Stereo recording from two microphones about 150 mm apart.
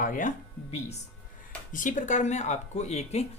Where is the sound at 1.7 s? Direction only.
60° left (ahead or behind).